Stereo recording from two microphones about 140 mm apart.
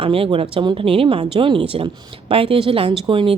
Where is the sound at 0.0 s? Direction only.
40° right (ahead or behind).